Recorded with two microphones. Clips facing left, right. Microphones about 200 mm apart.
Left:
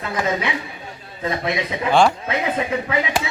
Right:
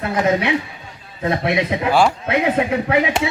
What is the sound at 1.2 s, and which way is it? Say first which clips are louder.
A man's voice: right 4 dB; 60° right (ahead or behind).